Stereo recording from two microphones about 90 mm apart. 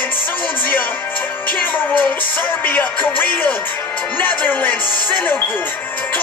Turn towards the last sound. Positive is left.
turn(degrees=20)  # may be behind; listen again after turning